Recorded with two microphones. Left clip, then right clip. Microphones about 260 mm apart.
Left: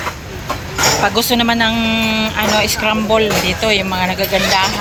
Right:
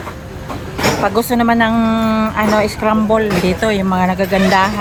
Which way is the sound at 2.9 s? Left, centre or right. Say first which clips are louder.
Left 1 dB; right.